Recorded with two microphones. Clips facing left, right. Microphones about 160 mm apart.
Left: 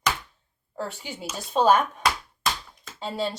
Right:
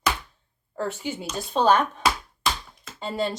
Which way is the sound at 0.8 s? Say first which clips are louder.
Right 4 dB; centre (ahead or behind).